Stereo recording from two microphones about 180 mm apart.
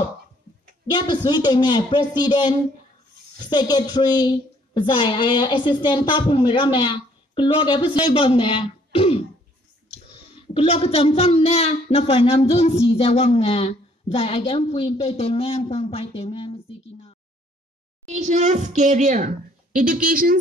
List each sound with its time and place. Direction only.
0.8 s a woman's voice: 25° left (ahead or behind)
10.3 s speech: 30° left (ahead or behind)
18.0 s a woman's voice: 40° right (ahead or behind)